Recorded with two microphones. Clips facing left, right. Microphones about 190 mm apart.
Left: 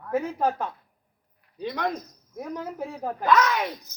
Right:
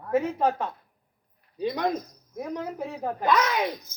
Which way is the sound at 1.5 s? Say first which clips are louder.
Right 2 dB; 15° right (ahead or behind).